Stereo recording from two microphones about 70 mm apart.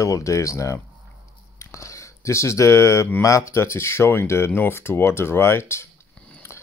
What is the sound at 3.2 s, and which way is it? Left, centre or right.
Speech, left.